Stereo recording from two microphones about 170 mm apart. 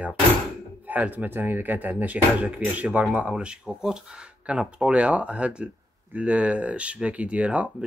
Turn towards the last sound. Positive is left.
turn(degrees=-10)  # may be behind; listen again after turning